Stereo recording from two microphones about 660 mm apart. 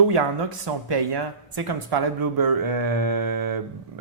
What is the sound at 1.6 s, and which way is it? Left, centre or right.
Speech, right.